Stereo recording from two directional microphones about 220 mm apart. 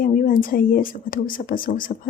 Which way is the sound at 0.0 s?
40° left (ahead or behind).